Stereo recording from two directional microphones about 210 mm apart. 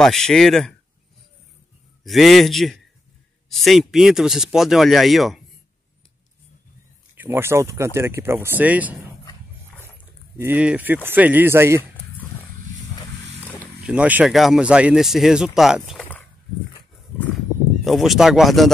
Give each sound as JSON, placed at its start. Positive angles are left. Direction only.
{"t": 0.0, "sound": "speech", "side_deg": 0}
{"t": 2.0, "sound": "speech", "side_deg": 0}
{"t": 7.2, "sound": "speech", "side_deg": -10}
{"t": 9.2, "sound": "dog", "side_deg": 15}
{"t": 10.3, "sound": "speech", "side_deg": -10}
{"t": 13.8, "sound": "speech", "side_deg": -5}
{"t": 17.8, "sound": "speech", "side_deg": 0}